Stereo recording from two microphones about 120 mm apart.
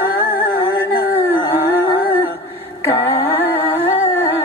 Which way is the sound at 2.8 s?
20° left (ahead or behind).